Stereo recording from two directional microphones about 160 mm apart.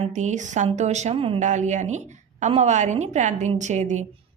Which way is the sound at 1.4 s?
50° right (ahead or behind).